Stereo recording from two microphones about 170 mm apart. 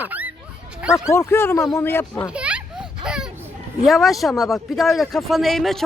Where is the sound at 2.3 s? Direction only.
5° right (ahead or behind).